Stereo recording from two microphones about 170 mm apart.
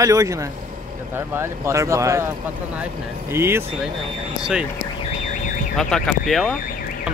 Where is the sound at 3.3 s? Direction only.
15° right (ahead or behind).